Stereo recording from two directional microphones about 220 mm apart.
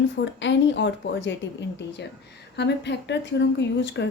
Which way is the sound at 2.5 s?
50° left (ahead or behind).